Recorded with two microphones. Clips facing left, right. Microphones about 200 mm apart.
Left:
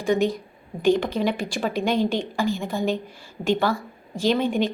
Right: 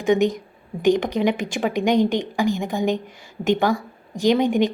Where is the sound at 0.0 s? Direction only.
20° right (ahead or behind).